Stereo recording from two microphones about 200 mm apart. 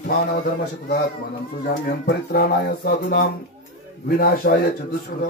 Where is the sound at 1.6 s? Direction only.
50° left (ahead or behind).